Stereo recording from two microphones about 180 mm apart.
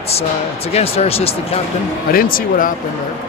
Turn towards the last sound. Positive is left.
turn(degrees=50)  # may be behind; listen again after turning